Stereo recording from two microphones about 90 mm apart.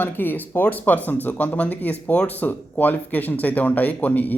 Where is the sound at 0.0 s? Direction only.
20° left (ahead or behind).